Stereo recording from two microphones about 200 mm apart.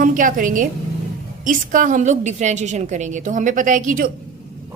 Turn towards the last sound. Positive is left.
turn(degrees=-40)  # may be behind; listen again after turning